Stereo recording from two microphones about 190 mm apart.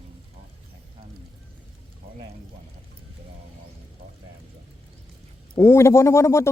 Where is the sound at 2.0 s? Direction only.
50° right (ahead or behind).